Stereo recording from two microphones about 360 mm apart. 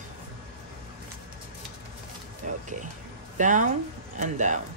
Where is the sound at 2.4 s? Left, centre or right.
Right.